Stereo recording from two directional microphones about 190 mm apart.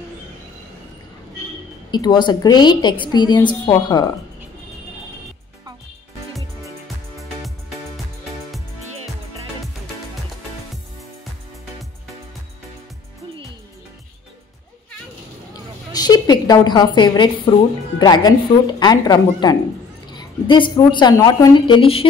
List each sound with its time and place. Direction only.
1.9 s a woman's voice: 20° left (ahead or behind)
15.9 s a woman's voice: 20° left (ahead or behind)